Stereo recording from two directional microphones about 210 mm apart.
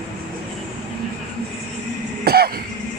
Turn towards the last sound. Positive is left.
turn(degrees=-50)  # may be behind; listen again after turning